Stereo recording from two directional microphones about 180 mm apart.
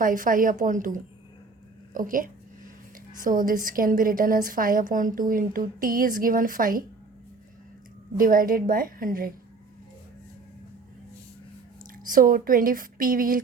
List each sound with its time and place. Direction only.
0.0 s a woman's voice: 50° right (ahead or behind)
8.2 s a woman's voice: 50° right (ahead or behind)
12.1 s a woman's voice: 50° right (ahead or behind)